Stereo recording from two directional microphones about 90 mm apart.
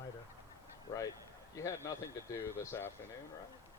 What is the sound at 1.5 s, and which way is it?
Speech, 35° left (ahead or behind).